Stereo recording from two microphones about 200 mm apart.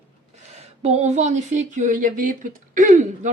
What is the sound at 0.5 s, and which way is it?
Speech, 30° right (ahead or behind).